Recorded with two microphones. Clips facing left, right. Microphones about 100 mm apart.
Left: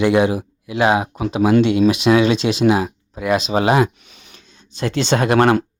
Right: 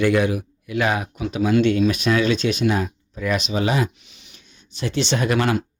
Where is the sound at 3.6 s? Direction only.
75° left (ahead or behind).